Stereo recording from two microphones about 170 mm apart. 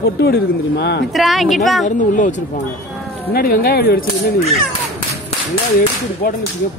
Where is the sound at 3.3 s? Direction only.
60° left (ahead or behind).